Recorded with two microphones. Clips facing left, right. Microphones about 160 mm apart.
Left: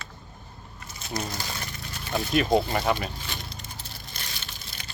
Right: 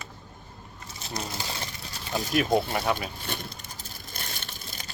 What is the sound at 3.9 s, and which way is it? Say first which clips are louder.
Crushing: right 1 dB; 50° right (ahead or behind).